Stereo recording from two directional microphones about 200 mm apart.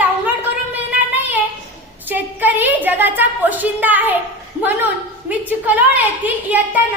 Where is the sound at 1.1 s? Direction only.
10° right (ahead or behind).